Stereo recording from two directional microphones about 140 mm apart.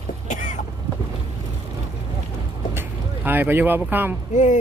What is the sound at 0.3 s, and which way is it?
Cough, 65° left (ahead or behind).